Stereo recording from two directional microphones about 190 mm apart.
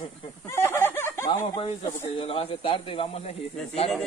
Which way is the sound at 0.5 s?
15° left (ahead or behind).